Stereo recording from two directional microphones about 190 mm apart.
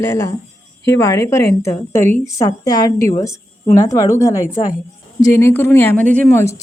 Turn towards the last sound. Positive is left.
turn(degrees=10)  # may be behind; listen again after turning